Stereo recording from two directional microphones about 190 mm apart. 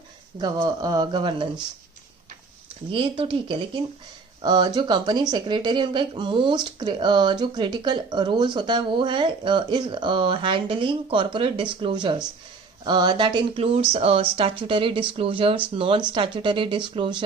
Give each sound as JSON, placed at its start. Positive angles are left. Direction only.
{"t": 0.3, "sound": "speech", "side_deg": -20}
{"t": 2.9, "sound": "speech", "side_deg": -25}